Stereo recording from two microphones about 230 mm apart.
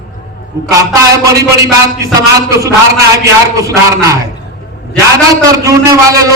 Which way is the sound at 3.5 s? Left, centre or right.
Centre.